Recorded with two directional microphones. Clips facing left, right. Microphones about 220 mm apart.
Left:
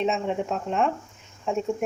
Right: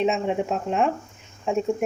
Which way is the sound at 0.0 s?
5° right (ahead or behind).